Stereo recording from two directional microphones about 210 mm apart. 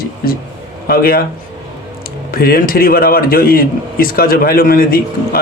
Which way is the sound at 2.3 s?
45° left (ahead or behind).